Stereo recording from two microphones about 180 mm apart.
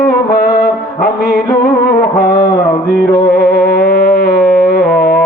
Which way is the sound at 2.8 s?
60° left (ahead or behind).